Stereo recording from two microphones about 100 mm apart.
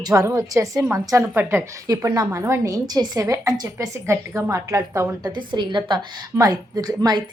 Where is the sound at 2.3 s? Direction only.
30° right (ahead or behind).